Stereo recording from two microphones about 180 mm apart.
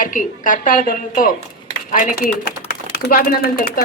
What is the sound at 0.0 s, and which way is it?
A woman's voice, 50° left (ahead or behind).